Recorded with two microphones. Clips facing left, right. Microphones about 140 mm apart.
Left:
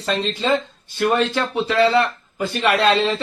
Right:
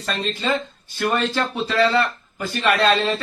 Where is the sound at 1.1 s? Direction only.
15° left (ahead or behind).